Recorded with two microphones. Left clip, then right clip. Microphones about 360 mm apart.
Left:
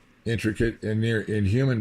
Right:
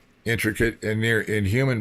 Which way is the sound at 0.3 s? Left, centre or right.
Centre.